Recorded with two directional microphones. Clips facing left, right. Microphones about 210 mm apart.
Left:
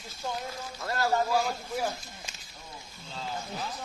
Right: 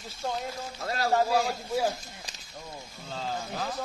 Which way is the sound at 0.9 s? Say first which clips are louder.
Right 2 dB; 30° right (ahead or behind).